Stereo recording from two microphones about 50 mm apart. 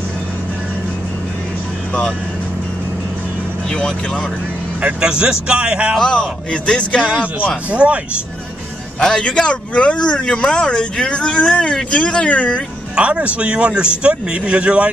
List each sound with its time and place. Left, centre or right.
3.7 s a man's voice: centre
5.0 s speech: centre
5.9 s a man's voice: centre
7.7 s speech: right
9.0 s a man's voice: centre
12.9 s speech: right